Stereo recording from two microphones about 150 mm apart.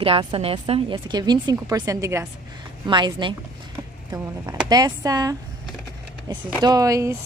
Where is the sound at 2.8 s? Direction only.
30° right (ahead or behind).